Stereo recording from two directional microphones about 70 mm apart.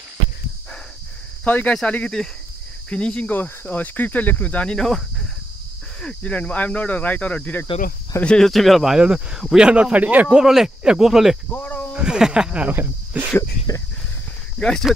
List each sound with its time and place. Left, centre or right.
1.4 s cricket: left
3.3 s speech: left
4.7 s speech: centre
5.9 s speech: centre
8.4 s speech: centre
9.7 s speech: centre
10.2 s speech: centre
11.5 s a sound: left
11.9 s speech: centre
12.6 s speech: right
13.4 s speech: left
14.6 s cricket: centre